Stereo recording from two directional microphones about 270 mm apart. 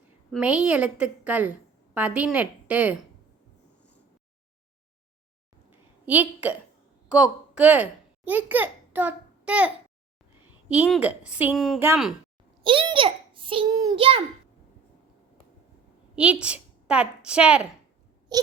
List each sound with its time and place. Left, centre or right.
0.3 s a woman's voice: centre
6.1 s a woman's voice: centre
10.8 s a woman's voice: centre
12.6 s a child's voice: centre
16.4 s a woman's voice: centre
18.3 s a sound: centre